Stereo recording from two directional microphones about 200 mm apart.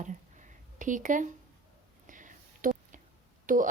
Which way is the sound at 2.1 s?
40° right (ahead or behind).